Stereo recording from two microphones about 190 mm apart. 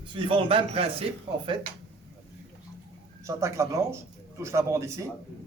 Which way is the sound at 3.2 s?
15° right (ahead or behind).